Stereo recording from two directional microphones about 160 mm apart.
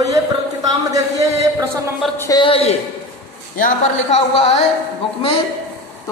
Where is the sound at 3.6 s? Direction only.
55° left (ahead or behind).